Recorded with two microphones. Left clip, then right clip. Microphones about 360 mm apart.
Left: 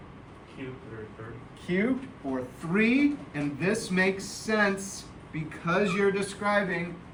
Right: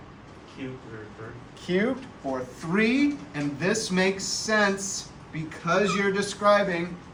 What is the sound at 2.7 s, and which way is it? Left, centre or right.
Speech, centre.